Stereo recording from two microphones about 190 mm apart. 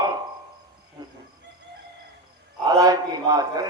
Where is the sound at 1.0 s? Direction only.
20° right (ahead or behind).